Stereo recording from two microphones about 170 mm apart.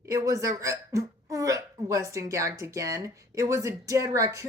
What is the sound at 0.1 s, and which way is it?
Speech, 20° right (ahead or behind).